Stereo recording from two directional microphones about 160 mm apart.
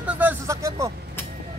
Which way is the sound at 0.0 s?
10° right (ahead or behind).